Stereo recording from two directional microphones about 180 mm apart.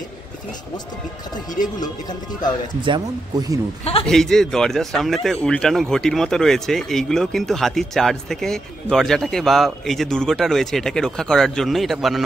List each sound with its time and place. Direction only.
2.8 s speech: 25° right (ahead or behind)
4.0 s speech: 5° left (ahead or behind)